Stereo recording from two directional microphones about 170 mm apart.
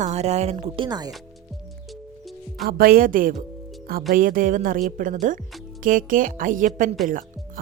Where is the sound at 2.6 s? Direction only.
60° right (ahead or behind).